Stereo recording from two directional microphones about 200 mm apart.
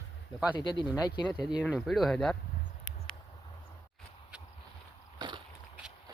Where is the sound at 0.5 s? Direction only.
25° left (ahead or behind).